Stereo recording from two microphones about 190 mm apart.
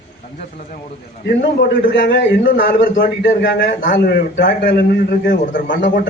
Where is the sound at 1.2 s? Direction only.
65° left (ahead or behind).